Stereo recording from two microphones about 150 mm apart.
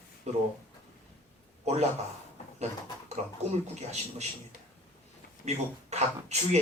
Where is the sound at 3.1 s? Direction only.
50° right (ahead or behind).